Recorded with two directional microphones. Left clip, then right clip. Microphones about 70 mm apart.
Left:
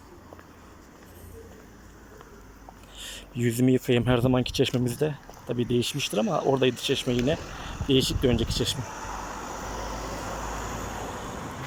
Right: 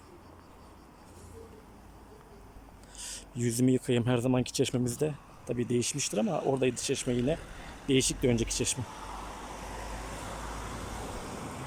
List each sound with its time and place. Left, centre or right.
3.0 s speech: right
6.2 s speech: centre
6.6 s speech: right
7.3 s a sound: centre
7.9 s speech: right
8.8 s vehicle: left
11.0 s vehicle: centre